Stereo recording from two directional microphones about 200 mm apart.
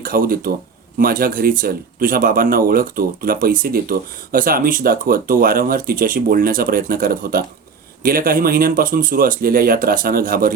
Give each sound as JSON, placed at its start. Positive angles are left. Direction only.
{"t": 0.0, "sound": "speech", "side_deg": -45}